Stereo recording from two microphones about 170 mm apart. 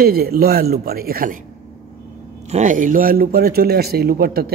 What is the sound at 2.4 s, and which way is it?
A man's voice, 45° right (ahead or behind).